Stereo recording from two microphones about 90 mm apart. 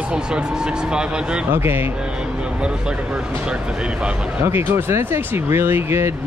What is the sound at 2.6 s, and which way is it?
Speech, 10° right (ahead or behind).